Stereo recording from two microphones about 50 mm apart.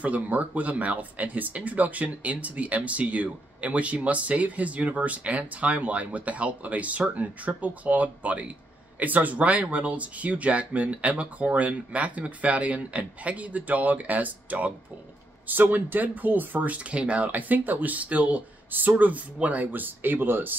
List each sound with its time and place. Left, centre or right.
0.0 s speech: right